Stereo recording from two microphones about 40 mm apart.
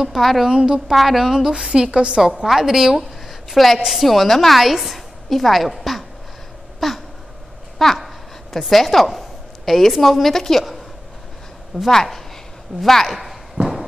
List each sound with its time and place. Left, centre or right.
0.2 s a woman's voice: centre
0.5 s a woman's voice: right
0.7 s a woman's voice: centre
1.5 s a woman's voice: centre
2.4 s a woman's voice: centre
3.3 s a sound: centre
4.0 s a woman's voice: centre
7.8 s a sound: centre
8.5 s a woman's voice: centre
11.9 s a woman's voice: centre
13.6 s a sound: centre